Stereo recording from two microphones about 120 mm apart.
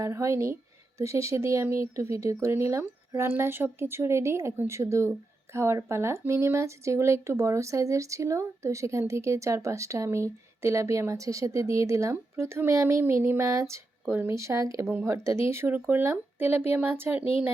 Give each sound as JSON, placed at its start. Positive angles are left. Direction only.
{"t": 0.0, "sound": "speech", "side_deg": -25}